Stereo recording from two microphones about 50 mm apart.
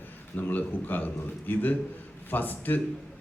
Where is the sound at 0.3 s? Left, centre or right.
Left.